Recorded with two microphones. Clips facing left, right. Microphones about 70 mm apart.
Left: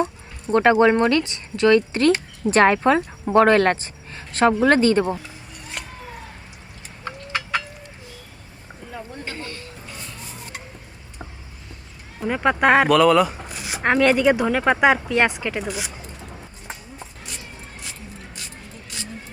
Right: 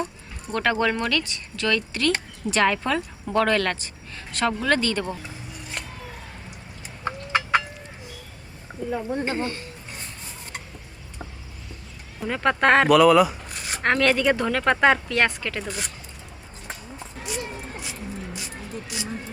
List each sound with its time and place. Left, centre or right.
0.0 s speech: left
5.8 s music: centre
7.0 s a sound: right
9.2 s speech: right
12.2 s speech: centre
12.9 s speech: centre
17.2 s a sound: centre